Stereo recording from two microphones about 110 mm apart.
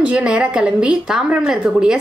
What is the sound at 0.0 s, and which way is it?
A woman's voice, 10° right (ahead or behind).